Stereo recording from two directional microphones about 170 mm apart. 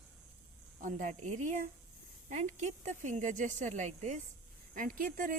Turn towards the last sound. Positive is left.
turn(degrees=-55)  # may be behind; listen again after turning